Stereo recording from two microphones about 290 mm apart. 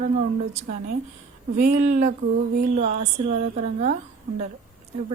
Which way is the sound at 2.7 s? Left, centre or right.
Right.